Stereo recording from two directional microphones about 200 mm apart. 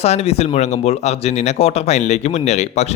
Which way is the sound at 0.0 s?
30° left (ahead or behind).